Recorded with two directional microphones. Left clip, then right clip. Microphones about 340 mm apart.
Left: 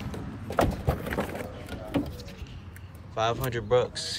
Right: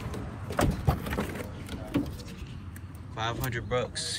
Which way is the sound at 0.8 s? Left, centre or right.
Centre.